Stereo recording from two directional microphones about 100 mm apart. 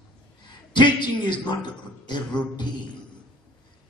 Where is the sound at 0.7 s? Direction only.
50° left (ahead or behind).